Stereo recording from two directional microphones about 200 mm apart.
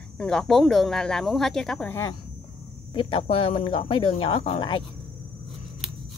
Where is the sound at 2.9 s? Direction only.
30° left (ahead or behind).